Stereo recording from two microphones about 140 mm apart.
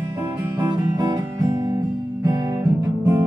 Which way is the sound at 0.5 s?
30° right (ahead or behind).